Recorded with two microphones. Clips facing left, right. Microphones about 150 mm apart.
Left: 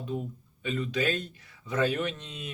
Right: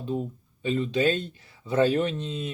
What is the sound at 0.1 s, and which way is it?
Speech, 30° right (ahead or behind).